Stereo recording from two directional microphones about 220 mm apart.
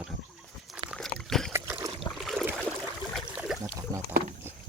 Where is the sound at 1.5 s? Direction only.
10° right (ahead or behind).